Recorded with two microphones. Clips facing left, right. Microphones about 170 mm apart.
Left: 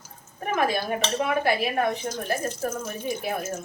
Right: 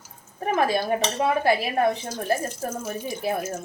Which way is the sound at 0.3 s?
30° right (ahead or behind).